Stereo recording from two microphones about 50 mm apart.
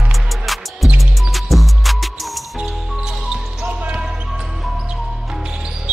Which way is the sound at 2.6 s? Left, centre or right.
Centre.